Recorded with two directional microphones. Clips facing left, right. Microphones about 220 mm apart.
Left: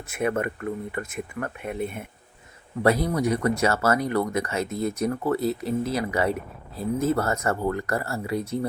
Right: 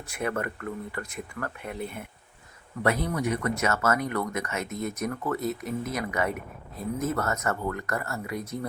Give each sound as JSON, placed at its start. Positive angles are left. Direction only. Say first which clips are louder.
{"t": 0.1, "sound": "speech", "louder": "left 5 dB", "side_deg": 20}
{"t": 2.8, "sound": "speech", "louder": "left 5 dB", "side_deg": 35}